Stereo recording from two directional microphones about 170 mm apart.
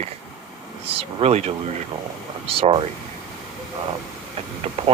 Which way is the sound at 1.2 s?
40° right (ahead or behind).